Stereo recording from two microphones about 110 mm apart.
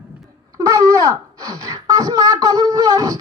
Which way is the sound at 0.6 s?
30° right (ahead or behind).